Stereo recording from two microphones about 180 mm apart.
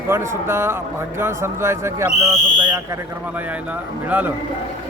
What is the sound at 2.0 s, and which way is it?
Speech, 40° left (ahead or behind).